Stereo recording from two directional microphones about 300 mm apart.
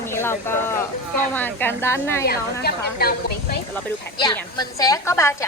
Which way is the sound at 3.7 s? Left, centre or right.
Centre.